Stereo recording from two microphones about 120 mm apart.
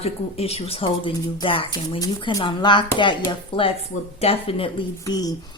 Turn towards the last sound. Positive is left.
turn(degrees=30)  # may be behind; listen again after turning